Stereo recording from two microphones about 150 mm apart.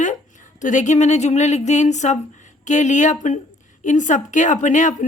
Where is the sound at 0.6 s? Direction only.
55° left (ahead or behind).